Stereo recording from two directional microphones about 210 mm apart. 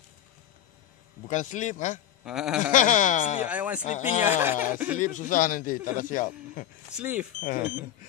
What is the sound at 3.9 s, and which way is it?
Speech, 35° left (ahead or behind).